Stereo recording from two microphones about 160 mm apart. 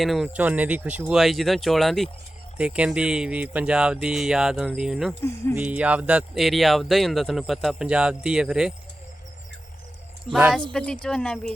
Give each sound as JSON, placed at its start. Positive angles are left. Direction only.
{"t": 0.0, "sound": "speech", "side_deg": 0}
{"t": 5.2, "sound": "speech", "side_deg": 15}
{"t": 5.5, "sound": "speech", "side_deg": -10}
{"t": 10.3, "sound": "speech", "side_deg": -5}